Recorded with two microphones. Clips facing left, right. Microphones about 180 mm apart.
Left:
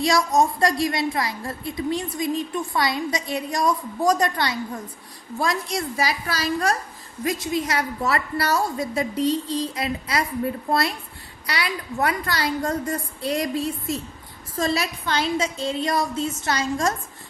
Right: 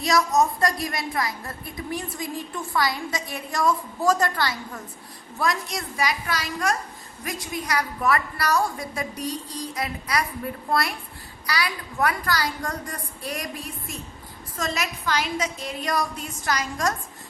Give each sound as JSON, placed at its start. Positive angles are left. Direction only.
{"t": 0.3, "sound": "a woman's voice", "side_deg": 25}
{"t": 5.7, "sound": "a woman's voice", "side_deg": 30}